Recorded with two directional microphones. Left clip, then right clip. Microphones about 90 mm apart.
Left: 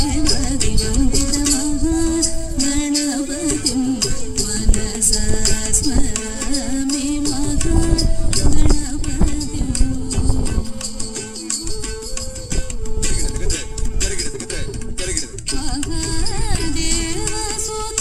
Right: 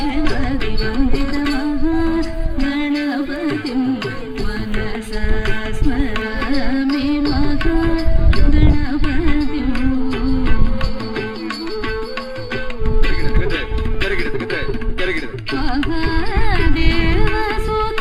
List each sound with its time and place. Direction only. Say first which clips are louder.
0.0 s music: even; 25° left (ahead or behind)
6.4 s music: right 2 dB; 30° left (ahead or behind)
14.0 s music: right 5 dB; 40° left (ahead or behind)